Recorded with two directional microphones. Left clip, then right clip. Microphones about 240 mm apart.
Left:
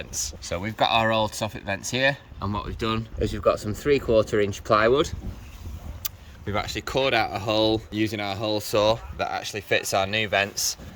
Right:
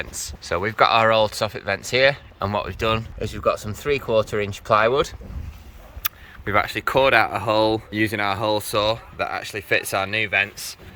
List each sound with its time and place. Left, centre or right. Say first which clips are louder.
0.3 s speech: right 7 dB; centre
2.6 s speech: right 6 dB; centre
3.2 s speech: even; right
6.0 s speech: right 8 dB; centre; by 10.8 s left